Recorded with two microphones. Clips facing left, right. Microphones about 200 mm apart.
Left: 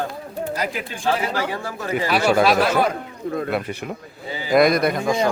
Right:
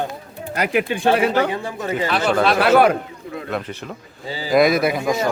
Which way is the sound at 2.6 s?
70° right (ahead or behind).